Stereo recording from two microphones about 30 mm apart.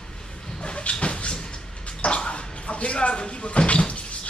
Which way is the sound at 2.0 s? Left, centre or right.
Left.